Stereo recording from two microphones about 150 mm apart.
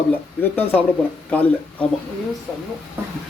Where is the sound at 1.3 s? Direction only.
10° left (ahead or behind).